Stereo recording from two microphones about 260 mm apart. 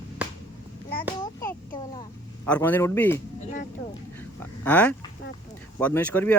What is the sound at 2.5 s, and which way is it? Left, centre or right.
Speech, centre.